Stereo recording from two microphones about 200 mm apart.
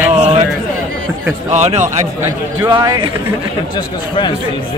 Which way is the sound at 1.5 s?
35° right (ahead or behind).